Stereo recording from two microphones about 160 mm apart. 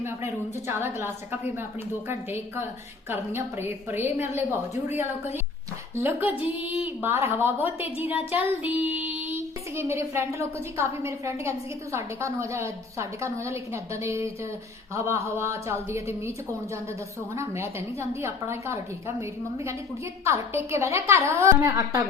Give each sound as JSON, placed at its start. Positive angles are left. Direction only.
{"t": 0.7, "sound": "a woman's voice", "side_deg": -15}
{"t": 8.3, "sound": "child singing", "side_deg": -10}
{"t": 9.7, "sound": "a woman's voice", "side_deg": -15}
{"t": 17.3, "sound": "a woman's voice", "side_deg": -15}